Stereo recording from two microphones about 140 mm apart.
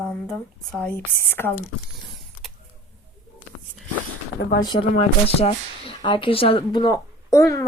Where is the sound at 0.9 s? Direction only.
15° left (ahead or behind).